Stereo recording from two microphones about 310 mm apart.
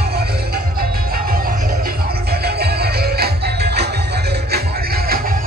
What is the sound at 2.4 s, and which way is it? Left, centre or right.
Music, right.